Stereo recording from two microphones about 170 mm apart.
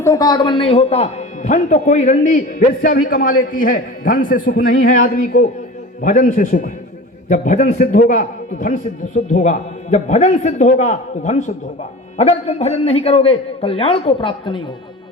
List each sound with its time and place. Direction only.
0.0 s a man's voice: 20° left (ahead or behind); by 2.4 s 45° left (ahead or behind)
2.8 s a man's voice: 60° left (ahead or behind); by 14.6 s 30° left (ahead or behind)